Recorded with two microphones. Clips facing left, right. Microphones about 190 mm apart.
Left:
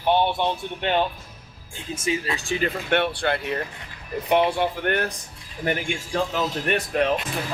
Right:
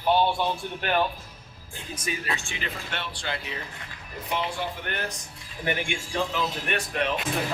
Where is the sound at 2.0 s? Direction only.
25° left (ahead or behind).